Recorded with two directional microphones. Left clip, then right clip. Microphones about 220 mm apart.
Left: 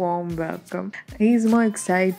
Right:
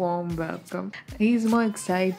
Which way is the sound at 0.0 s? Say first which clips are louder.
Left 3 dB; 10° left (ahead or behind).